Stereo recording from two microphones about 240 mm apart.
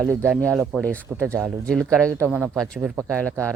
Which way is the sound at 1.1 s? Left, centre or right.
Centre.